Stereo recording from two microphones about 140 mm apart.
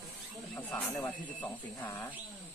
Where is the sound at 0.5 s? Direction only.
10° left (ahead or behind).